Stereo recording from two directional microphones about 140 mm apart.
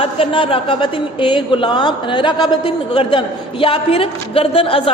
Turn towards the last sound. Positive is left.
turn(degrees=40)  # may be behind; listen again after turning